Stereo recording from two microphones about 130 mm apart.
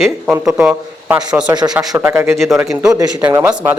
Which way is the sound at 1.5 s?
35° right (ahead or behind).